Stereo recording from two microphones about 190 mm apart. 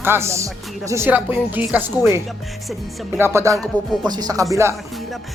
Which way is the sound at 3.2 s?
15° right (ahead or behind).